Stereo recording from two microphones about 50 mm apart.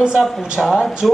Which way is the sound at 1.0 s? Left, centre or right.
Centre.